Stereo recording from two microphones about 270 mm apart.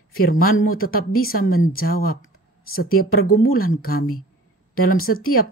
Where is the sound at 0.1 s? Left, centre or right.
Left.